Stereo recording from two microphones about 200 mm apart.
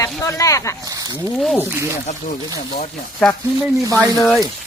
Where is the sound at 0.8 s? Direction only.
20° right (ahead or behind).